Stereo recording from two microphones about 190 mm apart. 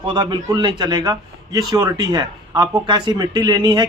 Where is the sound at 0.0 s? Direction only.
25° right (ahead or behind).